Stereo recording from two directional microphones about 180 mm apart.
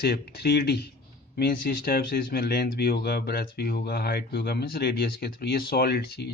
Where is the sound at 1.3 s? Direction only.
55° left (ahead or behind).